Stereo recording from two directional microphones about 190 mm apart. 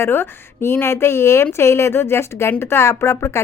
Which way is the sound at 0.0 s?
10° left (ahead or behind).